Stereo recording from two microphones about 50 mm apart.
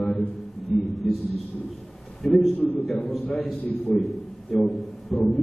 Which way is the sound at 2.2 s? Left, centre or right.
Centre.